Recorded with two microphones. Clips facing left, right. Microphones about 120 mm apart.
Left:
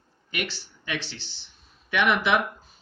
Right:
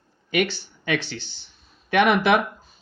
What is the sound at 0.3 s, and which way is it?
Speech, 60° right (ahead or behind).